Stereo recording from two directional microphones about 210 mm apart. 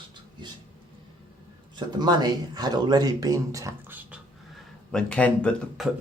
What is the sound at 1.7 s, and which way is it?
Speech, 20° right (ahead or behind).